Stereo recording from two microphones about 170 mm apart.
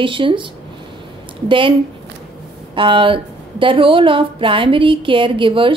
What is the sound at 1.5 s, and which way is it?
A woman's voice, 30° right (ahead or behind).